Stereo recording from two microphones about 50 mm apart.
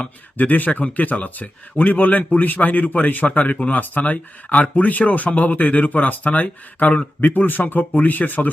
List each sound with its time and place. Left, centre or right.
0.0 s speech: left